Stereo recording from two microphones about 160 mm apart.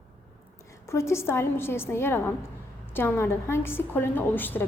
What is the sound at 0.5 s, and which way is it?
A woman's voice, 20° left (ahead or behind).